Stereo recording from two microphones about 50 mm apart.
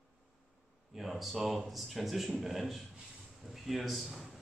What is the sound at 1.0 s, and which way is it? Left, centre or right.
A man's voice, centre.